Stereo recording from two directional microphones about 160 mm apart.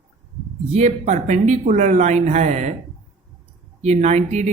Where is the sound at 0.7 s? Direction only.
45° right (ahead or behind).